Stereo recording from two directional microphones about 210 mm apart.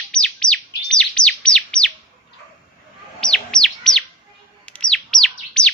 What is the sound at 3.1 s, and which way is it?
Chirp, 5° left (ahead or behind).